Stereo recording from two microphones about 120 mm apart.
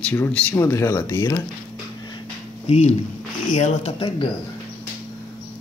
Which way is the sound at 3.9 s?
50° left (ahead or behind).